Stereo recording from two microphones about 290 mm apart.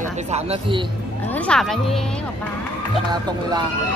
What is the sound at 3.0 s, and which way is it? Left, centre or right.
Speech, centre.